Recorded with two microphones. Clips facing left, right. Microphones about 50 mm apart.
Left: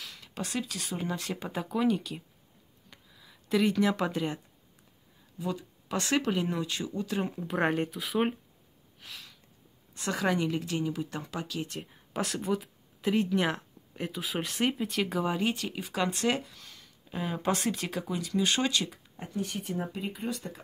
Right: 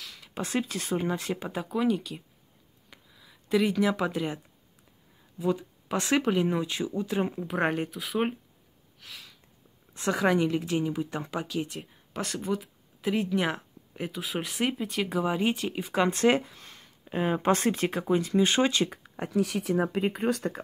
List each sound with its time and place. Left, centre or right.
0.0 s a sound: centre
0.4 s speech: right
1.3 s speech: centre
2.9 s a sound: centre
5.4 s speech: right
7.4 s speech: centre
9.0 s a sound: centre
9.9 s a sound: right
10.2 s speech: right
11.7 s speech: centre
15.3 s speech: right
19.1 s speech: right
20.0 s speech: right